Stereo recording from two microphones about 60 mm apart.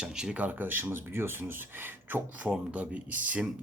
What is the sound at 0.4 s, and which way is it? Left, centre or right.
Speech, right.